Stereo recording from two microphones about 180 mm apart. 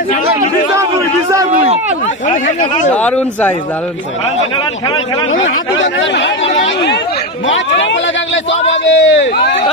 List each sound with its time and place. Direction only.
2.9 s speech: 10° left (ahead or behind)
5.9 s speech: 85° left